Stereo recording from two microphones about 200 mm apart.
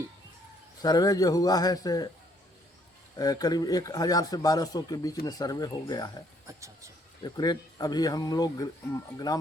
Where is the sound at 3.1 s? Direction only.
20° left (ahead or behind).